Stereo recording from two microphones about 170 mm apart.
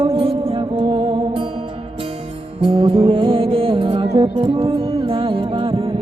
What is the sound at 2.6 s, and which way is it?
Music, 30° right (ahead or behind).